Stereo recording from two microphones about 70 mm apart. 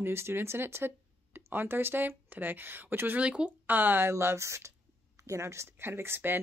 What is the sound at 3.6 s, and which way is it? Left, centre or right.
Speech, right.